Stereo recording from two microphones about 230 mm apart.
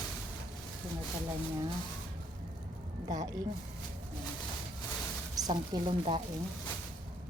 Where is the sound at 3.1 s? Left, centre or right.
Centre.